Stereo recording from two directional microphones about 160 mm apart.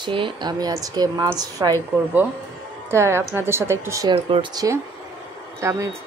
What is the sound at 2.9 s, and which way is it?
A woman's voice, 15° right (ahead or behind).